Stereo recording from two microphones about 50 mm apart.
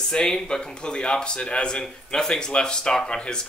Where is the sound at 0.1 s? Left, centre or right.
Centre.